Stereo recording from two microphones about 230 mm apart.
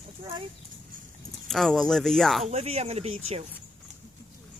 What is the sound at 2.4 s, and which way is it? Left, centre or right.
Speech, right.